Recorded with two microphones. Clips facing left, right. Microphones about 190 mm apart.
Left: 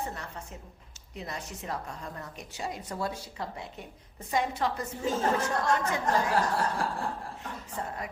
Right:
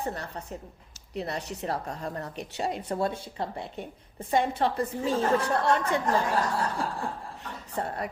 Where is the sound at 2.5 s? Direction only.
65° right (ahead or behind).